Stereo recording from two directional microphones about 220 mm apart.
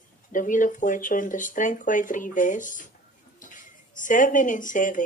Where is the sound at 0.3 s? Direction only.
35° left (ahead or behind).